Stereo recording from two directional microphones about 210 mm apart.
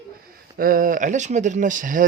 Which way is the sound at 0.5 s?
40° right (ahead or behind).